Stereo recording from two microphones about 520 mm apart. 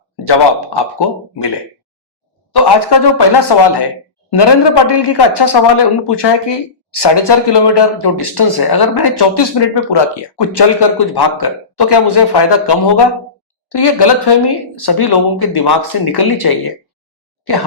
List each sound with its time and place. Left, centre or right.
0.3 s speech: left
2.5 s speech: left